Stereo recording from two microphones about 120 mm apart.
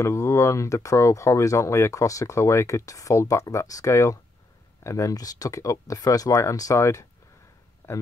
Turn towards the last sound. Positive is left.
turn(degrees=20)  # may be behind; listen again after turning